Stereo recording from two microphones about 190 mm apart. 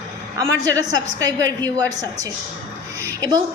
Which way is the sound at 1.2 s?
20° right (ahead or behind).